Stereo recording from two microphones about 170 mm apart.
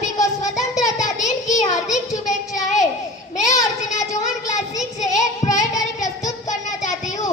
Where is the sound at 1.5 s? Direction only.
45° left (ahead or behind).